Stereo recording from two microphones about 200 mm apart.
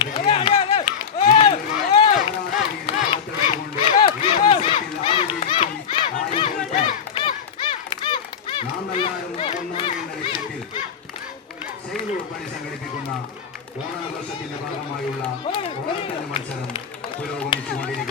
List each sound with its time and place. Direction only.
0.0 s run: 30° left (ahead or behind)
2.8 s a sound: 25° left (ahead or behind)
6.1 s crowd: 25° left (ahead or behind)
6.7 s run: 25° left (ahead or behind)
15.4 s run: 25° left (ahead or behind)